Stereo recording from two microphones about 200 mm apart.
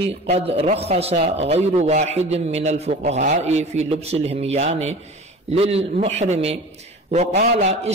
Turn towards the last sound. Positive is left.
turn(degrees=-35)  # may be behind; listen again after turning